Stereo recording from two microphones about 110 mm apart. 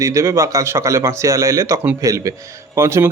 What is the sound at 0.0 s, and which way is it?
A man's voice, 30° right (ahead or behind).